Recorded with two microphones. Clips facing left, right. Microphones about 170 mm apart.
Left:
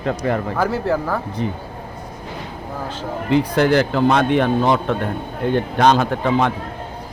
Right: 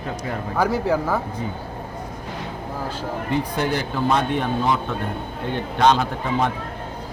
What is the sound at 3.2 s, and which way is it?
Speech, 90° left.